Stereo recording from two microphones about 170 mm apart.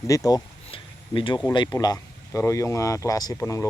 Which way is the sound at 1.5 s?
25° left (ahead or behind).